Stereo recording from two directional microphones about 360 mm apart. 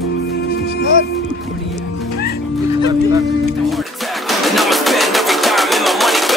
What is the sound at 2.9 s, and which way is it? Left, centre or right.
Music, centre.